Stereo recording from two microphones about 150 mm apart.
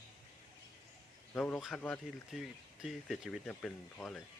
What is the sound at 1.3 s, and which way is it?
Speech, 10° left (ahead or behind).